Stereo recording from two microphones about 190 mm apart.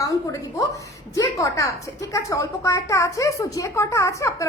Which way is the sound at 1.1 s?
15° left (ahead or behind).